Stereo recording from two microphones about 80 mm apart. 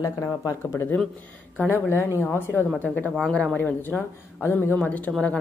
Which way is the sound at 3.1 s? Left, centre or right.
Centre.